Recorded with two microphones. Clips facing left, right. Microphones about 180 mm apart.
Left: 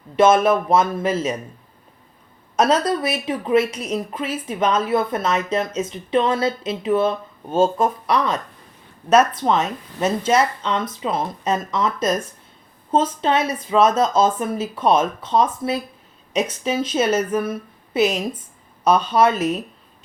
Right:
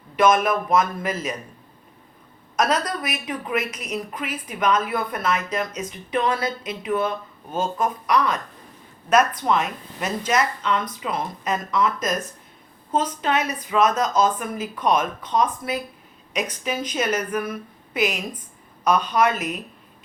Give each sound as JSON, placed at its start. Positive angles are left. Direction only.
{"t": 0.2, "sound": "a woman's voice", "side_deg": 30}
{"t": 2.6, "sound": "a woman's voice", "side_deg": 30}
{"t": 13.2, "sound": "a woman's voice", "side_deg": 30}